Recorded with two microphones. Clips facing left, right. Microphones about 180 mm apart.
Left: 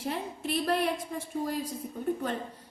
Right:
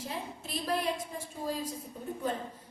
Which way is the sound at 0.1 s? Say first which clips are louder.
Left 8 dB; 65° left (ahead or behind).